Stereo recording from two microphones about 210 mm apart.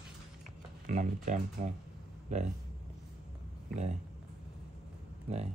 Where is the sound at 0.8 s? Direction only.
35° right (ahead or behind).